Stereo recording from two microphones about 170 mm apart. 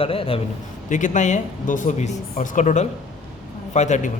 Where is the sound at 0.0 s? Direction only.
35° left (ahead or behind).